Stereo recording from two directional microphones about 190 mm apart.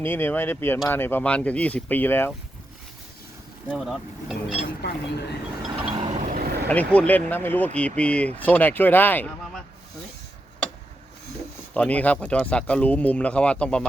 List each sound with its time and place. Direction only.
0.0 s speech: 10° left (ahead or behind)
3.7 s speech: centre (ahead or behind)
5.8 s vehicle: 30° right (ahead or behind); by 6.7 s 55° right (ahead or behind)
6.7 s speech: 5° left (ahead or behind)
11.7 s speech: 5° left (ahead or behind)